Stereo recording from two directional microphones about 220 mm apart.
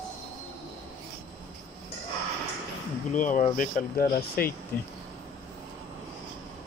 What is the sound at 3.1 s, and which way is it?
Speech, 35° left (ahead or behind).